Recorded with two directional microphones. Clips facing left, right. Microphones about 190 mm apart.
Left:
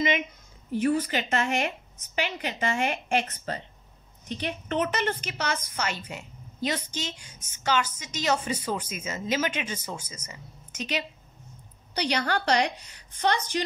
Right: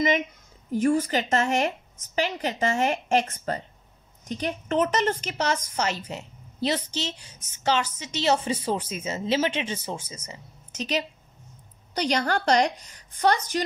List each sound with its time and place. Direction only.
0.7 s a woman's voice: 45° right (ahead or behind)